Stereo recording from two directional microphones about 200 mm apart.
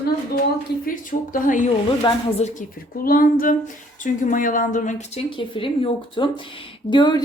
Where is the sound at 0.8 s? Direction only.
40° left (ahead or behind).